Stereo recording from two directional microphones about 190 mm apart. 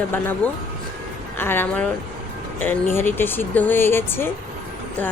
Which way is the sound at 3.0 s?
10° left (ahead or behind).